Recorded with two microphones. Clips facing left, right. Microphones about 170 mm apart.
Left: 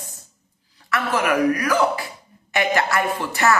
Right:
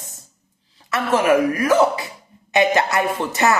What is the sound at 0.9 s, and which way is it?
Speech, 25° right (ahead or behind).